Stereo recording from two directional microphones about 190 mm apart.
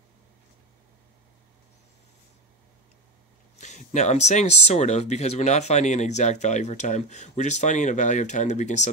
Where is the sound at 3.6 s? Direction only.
40° left (ahead or behind).